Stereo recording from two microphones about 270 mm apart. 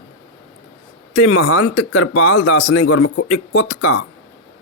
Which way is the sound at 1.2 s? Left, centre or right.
Left.